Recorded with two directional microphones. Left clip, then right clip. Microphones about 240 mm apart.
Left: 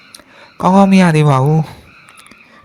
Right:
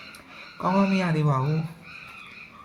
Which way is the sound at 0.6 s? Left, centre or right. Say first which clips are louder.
Left 13 dB; left.